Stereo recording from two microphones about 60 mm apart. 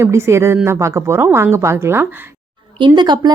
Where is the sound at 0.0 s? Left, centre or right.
Right.